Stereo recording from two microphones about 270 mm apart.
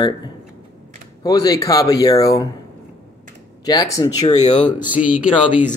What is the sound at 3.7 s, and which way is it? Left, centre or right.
Speech, centre.